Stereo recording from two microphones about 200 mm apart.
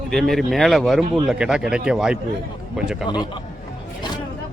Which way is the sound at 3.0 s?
20° left (ahead or behind).